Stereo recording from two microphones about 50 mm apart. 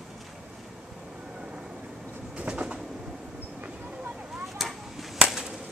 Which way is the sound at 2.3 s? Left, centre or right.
Right.